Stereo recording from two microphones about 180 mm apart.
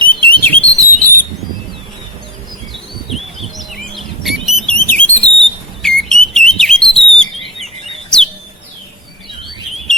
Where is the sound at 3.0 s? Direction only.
Centre (ahead or behind).